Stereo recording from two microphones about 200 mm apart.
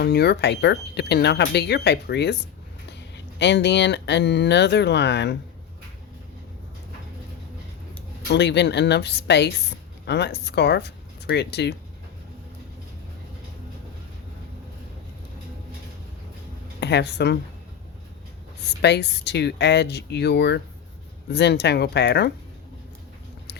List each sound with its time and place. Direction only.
0.0 s speech: 55° left (ahead or behind)
8.3 s speech: 60° left (ahead or behind)
16.8 s speech: 60° left (ahead or behind)
18.8 s speech: 60° left (ahead or behind)